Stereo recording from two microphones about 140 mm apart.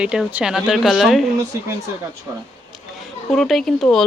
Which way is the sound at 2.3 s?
20° right (ahead or behind).